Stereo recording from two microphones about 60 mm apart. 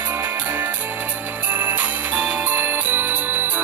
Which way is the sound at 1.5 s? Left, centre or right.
Right.